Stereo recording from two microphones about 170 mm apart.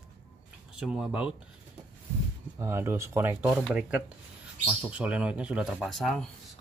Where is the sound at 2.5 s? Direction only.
15° right (ahead or behind).